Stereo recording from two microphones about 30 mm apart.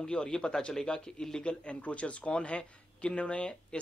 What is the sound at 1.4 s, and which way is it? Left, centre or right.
Speech, left.